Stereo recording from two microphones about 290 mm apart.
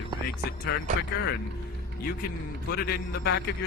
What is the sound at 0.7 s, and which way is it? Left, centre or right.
Speech, left.